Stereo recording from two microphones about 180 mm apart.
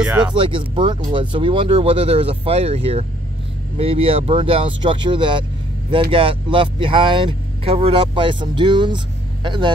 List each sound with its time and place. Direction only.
0.0 s speech: 5° right (ahead or behind)
0.3 s speech: 30° right (ahead or behind)